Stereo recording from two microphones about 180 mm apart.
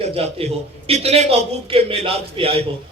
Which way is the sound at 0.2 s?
35° right (ahead or behind).